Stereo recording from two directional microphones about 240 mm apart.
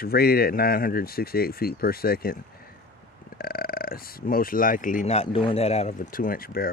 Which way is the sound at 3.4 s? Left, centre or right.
Left.